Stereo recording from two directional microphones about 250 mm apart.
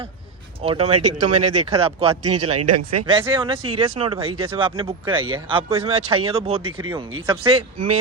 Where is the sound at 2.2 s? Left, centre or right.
Right.